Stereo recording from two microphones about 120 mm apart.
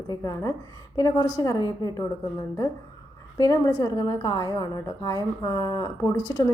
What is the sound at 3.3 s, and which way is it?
A woman's voice, 30° left (ahead or behind).